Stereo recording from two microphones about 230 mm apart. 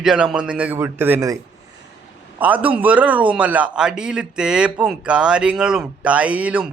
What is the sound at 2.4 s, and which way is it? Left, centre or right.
Speech, centre.